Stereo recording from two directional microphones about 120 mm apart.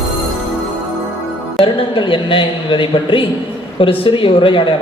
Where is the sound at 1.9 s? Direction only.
45° left (ahead or behind).